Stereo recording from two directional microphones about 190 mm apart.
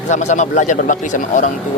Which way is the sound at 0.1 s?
40° left (ahead or behind).